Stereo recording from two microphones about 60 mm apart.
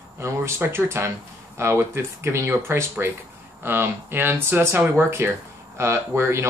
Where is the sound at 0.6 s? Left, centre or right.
Right.